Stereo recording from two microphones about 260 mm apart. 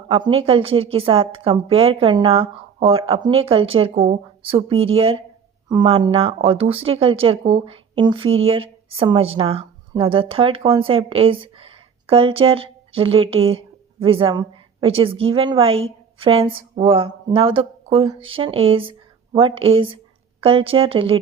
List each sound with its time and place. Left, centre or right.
0.1 s a woman's voice: right